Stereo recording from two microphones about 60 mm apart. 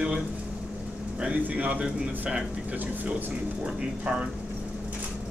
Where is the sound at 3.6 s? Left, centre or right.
Centre.